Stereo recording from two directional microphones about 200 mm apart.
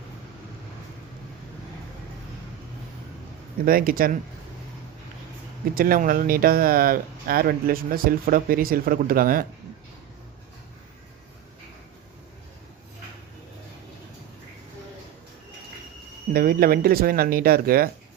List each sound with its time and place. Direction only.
3.7 s speech: 45° right (ahead or behind)
5.7 s speech: 45° right (ahead or behind)
16.3 s speech: 45° right (ahead or behind)